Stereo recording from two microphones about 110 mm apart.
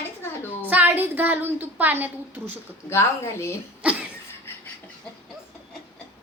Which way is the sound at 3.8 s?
10° right (ahead or behind).